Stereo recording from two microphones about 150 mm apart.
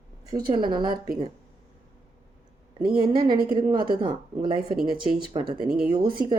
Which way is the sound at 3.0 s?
30° right (ahead or behind).